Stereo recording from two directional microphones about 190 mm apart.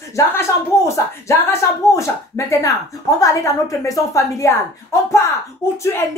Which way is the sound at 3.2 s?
15° left (ahead or behind).